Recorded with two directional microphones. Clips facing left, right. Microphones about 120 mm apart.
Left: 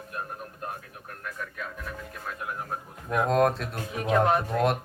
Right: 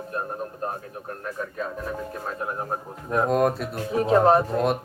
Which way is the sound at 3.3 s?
5° right (ahead or behind).